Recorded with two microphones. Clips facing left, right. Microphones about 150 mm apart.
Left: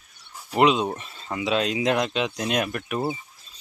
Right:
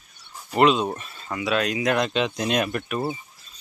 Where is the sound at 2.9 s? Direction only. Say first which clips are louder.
Even; 15° left (ahead or behind).